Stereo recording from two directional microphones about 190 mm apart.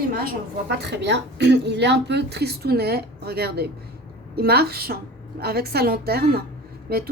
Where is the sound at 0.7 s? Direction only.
65° right (ahead or behind).